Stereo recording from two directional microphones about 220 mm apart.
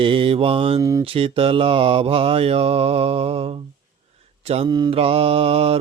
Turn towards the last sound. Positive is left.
turn(degrees=-25)  # may be behind; listen again after turning